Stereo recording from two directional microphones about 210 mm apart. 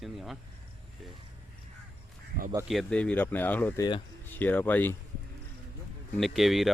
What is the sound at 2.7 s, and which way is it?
Speech, 5° left (ahead or behind).